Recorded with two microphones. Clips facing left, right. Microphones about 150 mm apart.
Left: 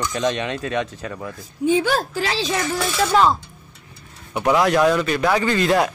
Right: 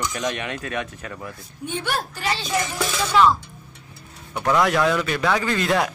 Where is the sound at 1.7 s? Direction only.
90° left.